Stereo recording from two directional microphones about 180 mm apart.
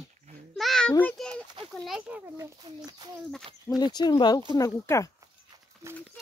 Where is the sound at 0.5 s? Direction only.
Centre (ahead or behind).